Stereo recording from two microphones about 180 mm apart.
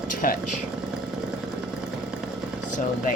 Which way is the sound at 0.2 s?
50° left (ahead or behind).